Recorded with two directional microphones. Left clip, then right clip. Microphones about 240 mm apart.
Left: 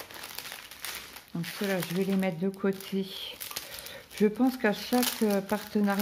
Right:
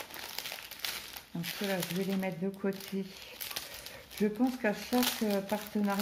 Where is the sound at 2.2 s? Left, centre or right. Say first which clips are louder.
Left 5 dB; left.